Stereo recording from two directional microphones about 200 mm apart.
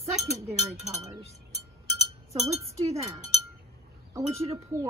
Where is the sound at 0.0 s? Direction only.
30° right (ahead or behind).